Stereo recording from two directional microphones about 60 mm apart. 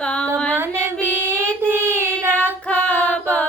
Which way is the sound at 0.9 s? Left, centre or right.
Right.